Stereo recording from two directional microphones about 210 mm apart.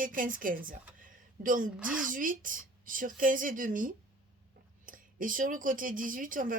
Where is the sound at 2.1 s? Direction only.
40° right (ahead or behind).